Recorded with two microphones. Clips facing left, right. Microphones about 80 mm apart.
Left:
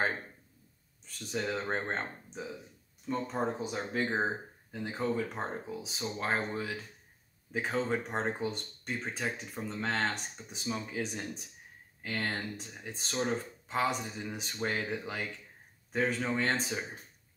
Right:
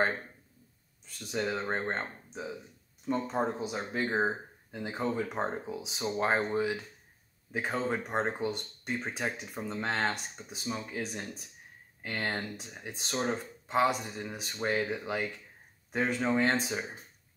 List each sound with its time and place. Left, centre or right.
1.2 s speech: centre
5.0 s speech: centre
5.9 s speech: centre
7.5 s speech: centre